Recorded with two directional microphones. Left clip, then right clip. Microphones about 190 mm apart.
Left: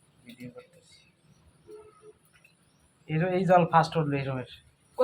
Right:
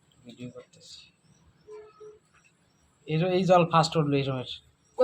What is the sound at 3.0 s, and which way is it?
A woman's voice, 30° right (ahead or behind).